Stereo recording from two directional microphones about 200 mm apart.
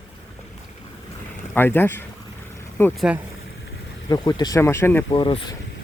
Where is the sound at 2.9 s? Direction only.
5° right (ahead or behind).